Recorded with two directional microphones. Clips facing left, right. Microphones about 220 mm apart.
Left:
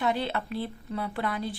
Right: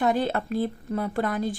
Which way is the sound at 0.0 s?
45° right (ahead or behind).